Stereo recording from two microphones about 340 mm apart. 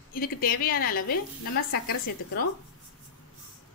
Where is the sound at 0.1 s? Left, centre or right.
Left.